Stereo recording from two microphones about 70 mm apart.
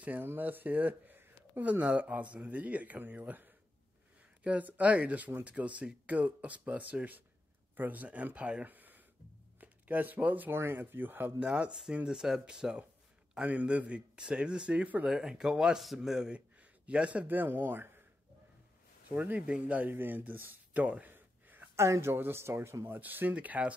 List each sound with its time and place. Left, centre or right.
0.0 s speech: right
11.3 s speech: centre
15.0 s speech: centre; by 18.0 s right
19.0 s speech: right
21.1 s a sound: right
21.7 s speech: right
22.9 s speech: right